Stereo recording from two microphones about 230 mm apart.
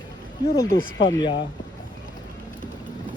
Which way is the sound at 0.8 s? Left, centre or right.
Left.